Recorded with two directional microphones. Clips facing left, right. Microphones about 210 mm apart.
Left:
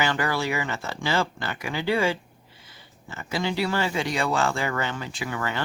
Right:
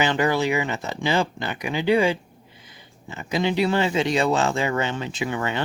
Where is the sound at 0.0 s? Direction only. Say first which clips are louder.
Right 4 dB; 20° right (ahead or behind).